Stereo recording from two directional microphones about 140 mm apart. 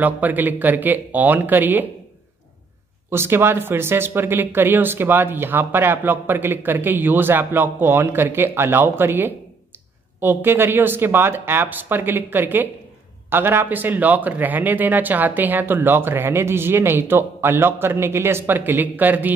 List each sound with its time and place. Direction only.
0.0 s speech: 10° right (ahead or behind)
3.1 s speech: 15° right (ahead or behind)